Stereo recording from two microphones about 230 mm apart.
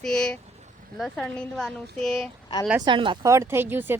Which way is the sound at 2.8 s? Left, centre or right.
Right.